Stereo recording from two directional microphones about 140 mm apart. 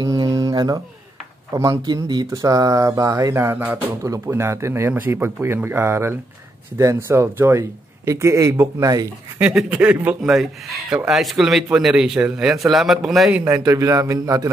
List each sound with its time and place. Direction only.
0.0 s a sound: 25° right (ahead or behind)
1.5 s speech: 25° right (ahead or behind)
9.4 s speech: 10° right (ahead or behind)
13.7 s speech: 25° right (ahead or behind)